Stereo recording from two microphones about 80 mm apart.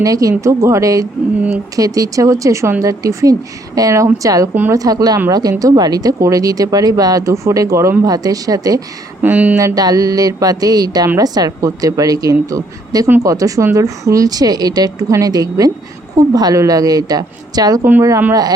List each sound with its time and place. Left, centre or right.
0.0 s speech: right
9.2 s speech: centre
9.6 s speech: right